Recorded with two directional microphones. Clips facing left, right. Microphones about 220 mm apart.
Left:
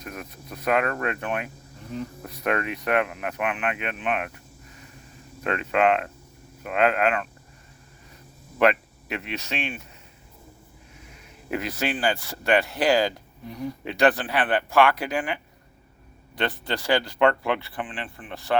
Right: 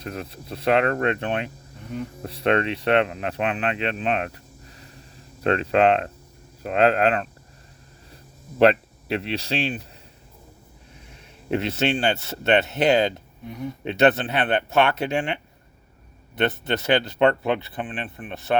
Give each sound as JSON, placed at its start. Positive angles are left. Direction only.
{"t": 0.0, "sound": "speech", "side_deg": -30}
{"t": 11.5, "sound": "speech", "side_deg": -25}
{"t": 13.5, "sound": "speech", "side_deg": 0}
{"t": 13.8, "sound": "speech", "side_deg": -25}